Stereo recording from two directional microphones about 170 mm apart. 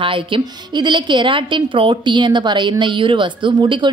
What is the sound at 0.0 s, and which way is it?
A woman's voice, 30° right (ahead or behind).